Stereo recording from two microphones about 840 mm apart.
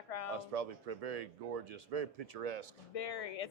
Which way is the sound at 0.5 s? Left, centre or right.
Right.